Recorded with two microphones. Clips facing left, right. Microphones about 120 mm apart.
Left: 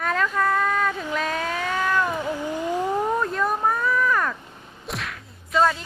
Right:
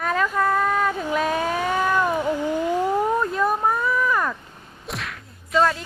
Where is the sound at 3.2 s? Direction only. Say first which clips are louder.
Right 2 dB; 5° right (ahead or behind).